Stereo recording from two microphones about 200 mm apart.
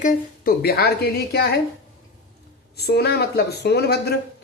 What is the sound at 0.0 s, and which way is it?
Speech, 45° left (ahead or behind).